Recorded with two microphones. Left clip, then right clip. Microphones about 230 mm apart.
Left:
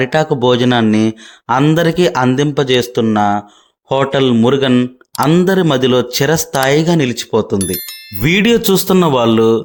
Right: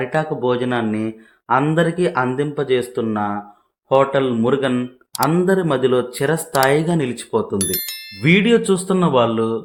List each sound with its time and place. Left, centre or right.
0.0 s speech: left
7.6 s speech: centre
8.2 s speech: left